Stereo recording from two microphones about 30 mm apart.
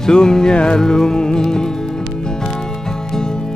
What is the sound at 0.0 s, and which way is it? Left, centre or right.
Music, left.